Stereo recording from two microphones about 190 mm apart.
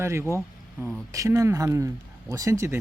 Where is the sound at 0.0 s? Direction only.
15° right (ahead or behind).